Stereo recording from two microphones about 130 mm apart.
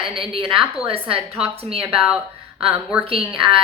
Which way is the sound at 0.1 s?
40° right (ahead or behind).